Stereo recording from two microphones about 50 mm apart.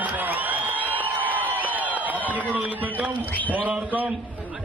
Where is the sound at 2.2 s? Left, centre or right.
Right.